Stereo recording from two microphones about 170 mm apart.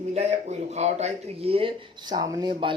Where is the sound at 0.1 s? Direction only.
40° right (ahead or behind).